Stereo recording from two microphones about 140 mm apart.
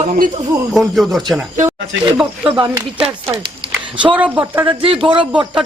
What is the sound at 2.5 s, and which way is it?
Speech, 40° right (ahead or behind).